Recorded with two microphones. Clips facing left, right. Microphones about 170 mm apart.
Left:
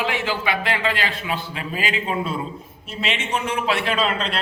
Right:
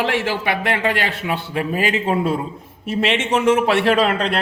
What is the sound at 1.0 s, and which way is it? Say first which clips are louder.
A man's voice: right 3 dB; 60° right (ahead or behind).